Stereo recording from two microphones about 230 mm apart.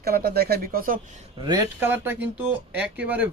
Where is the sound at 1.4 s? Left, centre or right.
Centre.